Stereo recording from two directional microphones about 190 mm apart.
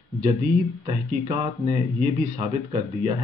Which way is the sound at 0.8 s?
25° right (ahead or behind).